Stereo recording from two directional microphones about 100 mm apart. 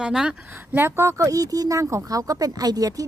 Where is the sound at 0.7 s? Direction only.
25° right (ahead or behind).